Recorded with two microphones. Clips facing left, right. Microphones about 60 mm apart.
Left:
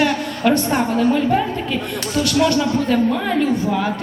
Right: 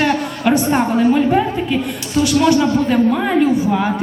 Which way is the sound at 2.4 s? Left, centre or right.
Centre.